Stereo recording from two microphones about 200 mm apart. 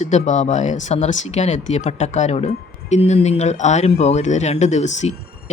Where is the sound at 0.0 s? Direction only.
35° left (ahead or behind).